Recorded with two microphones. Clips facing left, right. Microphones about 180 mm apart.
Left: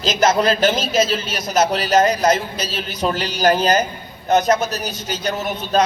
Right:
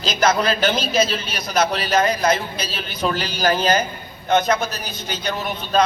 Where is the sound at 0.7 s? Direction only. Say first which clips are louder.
Left 1 dB; centre (ahead or behind).